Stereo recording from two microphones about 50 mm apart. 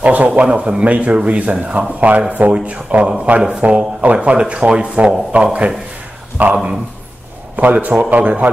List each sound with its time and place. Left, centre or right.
0.0 s a man's voice: right